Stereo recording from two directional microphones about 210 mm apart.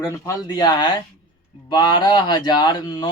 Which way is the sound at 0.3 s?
20° left (ahead or behind).